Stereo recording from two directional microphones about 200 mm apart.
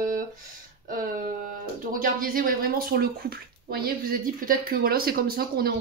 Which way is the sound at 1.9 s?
45° right (ahead or behind).